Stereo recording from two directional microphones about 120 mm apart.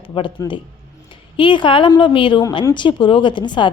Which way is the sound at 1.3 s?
45° left (ahead or behind).